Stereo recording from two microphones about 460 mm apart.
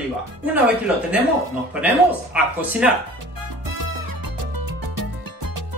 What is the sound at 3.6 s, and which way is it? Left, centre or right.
Music, right.